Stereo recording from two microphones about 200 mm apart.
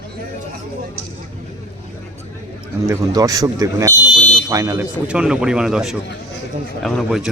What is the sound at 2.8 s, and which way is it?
A man's voice, 20° right (ahead or behind).